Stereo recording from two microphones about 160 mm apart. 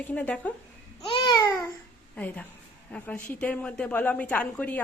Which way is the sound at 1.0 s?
30° left (ahead or behind).